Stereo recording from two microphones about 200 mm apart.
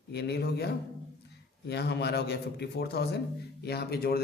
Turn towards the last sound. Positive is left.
turn(degrees=50)  # may be behind; listen again after turning